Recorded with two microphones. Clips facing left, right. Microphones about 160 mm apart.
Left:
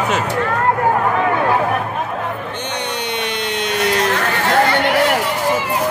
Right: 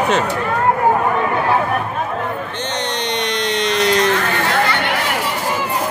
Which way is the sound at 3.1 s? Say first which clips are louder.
Right 4 dB; 5° left (ahead or behind).